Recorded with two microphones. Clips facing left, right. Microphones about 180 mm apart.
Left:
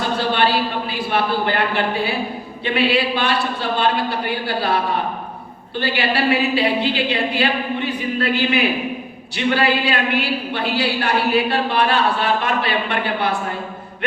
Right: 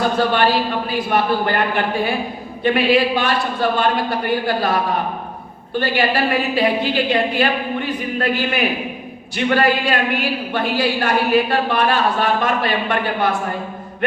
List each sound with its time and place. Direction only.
0.3 s a woman's voice: 45° right (ahead or behind)
5.8 s a woman's voice: 45° right (ahead or behind)